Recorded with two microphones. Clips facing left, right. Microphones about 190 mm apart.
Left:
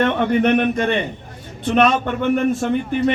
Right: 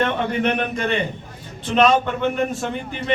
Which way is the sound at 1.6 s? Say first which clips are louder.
Even; 50° left (ahead or behind).